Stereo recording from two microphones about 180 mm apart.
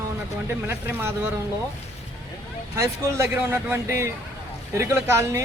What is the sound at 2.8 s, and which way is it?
Speech, 15° right (ahead or behind).